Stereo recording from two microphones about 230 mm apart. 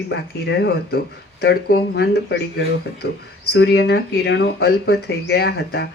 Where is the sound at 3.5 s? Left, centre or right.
Left.